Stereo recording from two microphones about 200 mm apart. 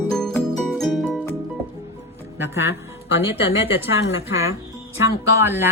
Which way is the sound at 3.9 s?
70° left (ahead or behind).